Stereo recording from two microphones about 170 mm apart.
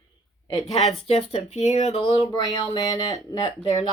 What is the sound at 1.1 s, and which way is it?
Speech, 35° left (ahead or behind).